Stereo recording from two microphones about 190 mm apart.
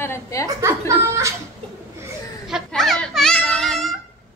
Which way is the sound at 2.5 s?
Centre (ahead or behind).